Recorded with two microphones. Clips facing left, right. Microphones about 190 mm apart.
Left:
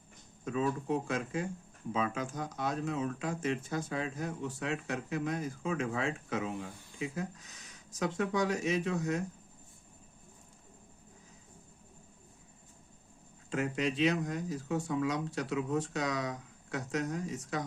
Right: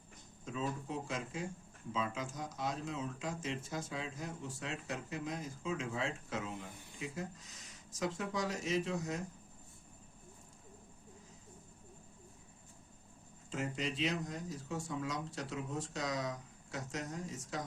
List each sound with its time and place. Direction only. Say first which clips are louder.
0.4 s speech: left 7 dB; 60° left (ahead or behind)
13.5 s speech: left 6 dB; 65° left (ahead or behind)